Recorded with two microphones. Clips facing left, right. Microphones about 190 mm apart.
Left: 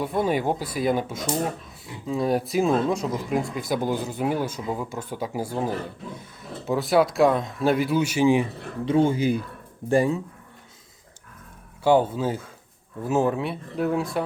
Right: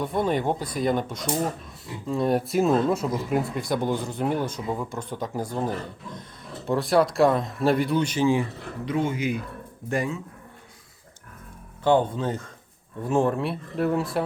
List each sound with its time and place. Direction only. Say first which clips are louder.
0.0 s speech: left 1 dB; 5° left (ahead or behind)
8.8 s speech: left 5 dB; 30° left (ahead or behind)
11.8 s speech: left 2 dB; 10° left (ahead or behind)